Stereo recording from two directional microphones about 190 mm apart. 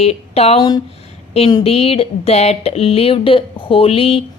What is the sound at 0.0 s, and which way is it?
Speech, 30° left (ahead or behind).